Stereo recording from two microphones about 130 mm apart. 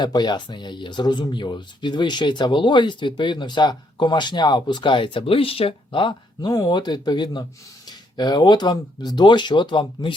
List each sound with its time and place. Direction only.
0.0 s speech: 35° left (ahead or behind)